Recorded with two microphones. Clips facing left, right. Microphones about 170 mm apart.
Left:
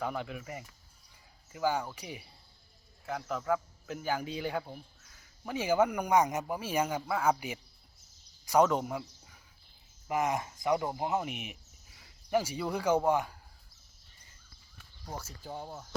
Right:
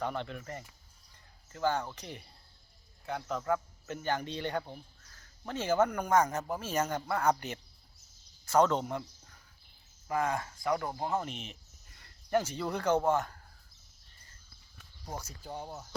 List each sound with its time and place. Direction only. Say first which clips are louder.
0.0 s a man's voice: even; 5° left (ahead or behind)
10.1 s speech: left 1 dB; 20° left (ahead or behind)
15.4 s speech: even; centre (ahead or behind)